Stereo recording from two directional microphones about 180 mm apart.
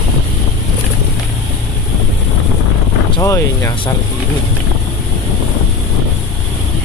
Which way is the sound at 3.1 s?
15° left (ahead or behind).